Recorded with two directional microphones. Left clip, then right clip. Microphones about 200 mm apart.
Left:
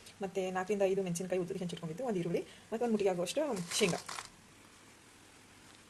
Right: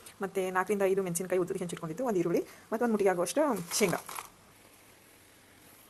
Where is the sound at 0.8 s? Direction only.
10° right (ahead or behind).